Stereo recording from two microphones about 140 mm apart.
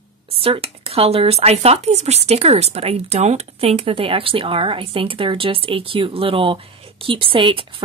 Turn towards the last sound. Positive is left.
turn(degrees=-40)  # may be behind; listen again after turning